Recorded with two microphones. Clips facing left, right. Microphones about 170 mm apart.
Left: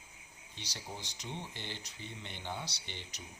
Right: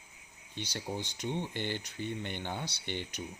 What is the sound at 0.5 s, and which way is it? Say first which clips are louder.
Speech: right 9 dB; 55° right (ahead or behind).